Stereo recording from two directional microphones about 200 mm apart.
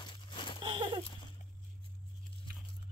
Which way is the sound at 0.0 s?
25° left (ahead or behind).